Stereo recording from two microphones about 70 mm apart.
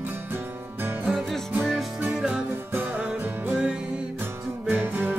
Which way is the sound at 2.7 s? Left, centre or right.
Right.